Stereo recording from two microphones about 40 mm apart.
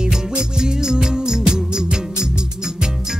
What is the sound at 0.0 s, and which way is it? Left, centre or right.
Music, right.